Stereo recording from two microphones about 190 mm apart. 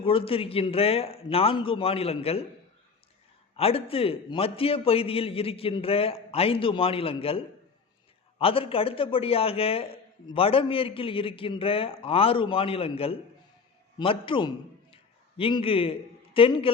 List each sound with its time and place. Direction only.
0.0 s a man's voice: 30° left (ahead or behind)
3.5 s a man's voice: 30° left (ahead or behind)